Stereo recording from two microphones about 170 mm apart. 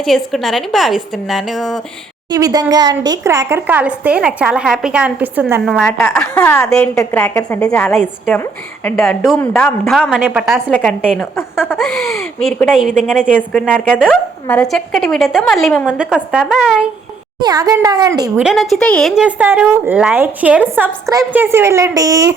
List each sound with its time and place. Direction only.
0.0 s a woman's voice: centre (ahead or behind)
2.3 s a woman's voice: 20° right (ahead or behind)
5.8 s a woman's voice: 10° left (ahead or behind)
6.7 s a woman's voice: 5° left (ahead or behind)
17.4 s speech: 20° right (ahead or behind)
18.3 s a woman's voice: centre (ahead or behind); by 22.4 s 20° right (ahead or behind)